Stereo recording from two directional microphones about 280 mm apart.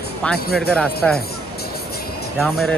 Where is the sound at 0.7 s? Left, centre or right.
Centre.